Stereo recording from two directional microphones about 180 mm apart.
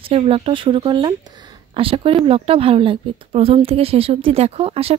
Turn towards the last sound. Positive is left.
turn(degrees=-35)  # may be behind; listen again after turning